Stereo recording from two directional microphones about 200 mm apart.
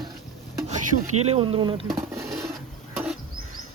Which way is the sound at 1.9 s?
15° right (ahead or behind).